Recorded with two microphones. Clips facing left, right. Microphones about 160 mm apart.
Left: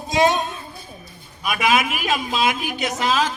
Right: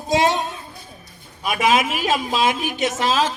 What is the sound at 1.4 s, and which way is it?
A man's voice, 30° right (ahead or behind).